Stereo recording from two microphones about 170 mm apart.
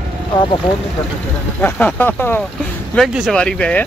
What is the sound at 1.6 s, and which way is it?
Speech, 10° left (ahead or behind).